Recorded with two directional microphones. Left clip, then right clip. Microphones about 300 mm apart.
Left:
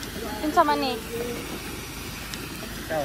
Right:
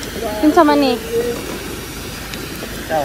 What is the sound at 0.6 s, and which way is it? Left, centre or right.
Speech, right.